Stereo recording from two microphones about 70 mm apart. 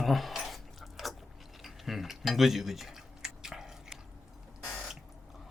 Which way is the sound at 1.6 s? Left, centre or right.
Centre.